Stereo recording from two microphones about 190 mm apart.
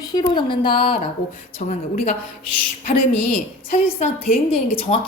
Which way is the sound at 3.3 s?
40° left (ahead or behind).